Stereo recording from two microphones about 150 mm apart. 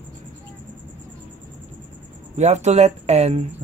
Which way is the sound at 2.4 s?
50° right (ahead or behind).